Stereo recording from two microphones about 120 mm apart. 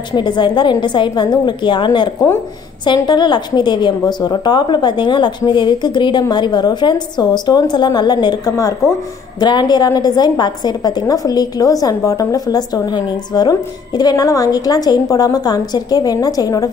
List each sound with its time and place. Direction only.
0.1 s a woman's voice: 40° left (ahead or behind)
3.1 s a woman's voice: 40° left (ahead or behind)